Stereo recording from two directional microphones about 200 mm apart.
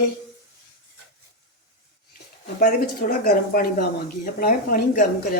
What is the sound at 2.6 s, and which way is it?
A woman's voice, 45° left (ahead or behind).